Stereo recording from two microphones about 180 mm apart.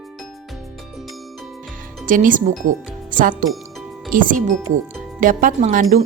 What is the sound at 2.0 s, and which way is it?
Speech, 45° right (ahead or behind).